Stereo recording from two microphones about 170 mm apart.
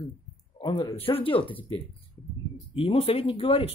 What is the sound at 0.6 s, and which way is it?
Speech, 30° left (ahead or behind).